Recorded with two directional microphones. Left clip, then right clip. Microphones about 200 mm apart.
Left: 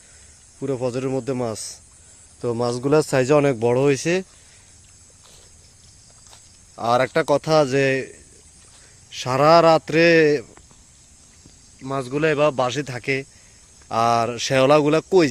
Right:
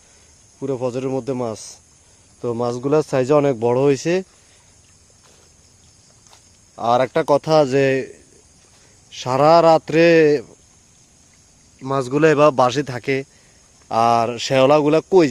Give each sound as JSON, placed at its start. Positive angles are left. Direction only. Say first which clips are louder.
{"t": 0.6, "sound": "speech", "louder": "right 1 dB", "side_deg": 0}
{"t": 6.7, "sound": "a man's voice", "louder": "right 2 dB", "side_deg": -5}
{"t": 11.8, "sound": "a man's voice", "louder": "right 6 dB", "side_deg": -35}